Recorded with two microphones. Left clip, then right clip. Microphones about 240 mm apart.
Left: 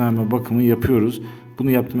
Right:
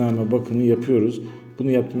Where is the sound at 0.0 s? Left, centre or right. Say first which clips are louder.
Even; left.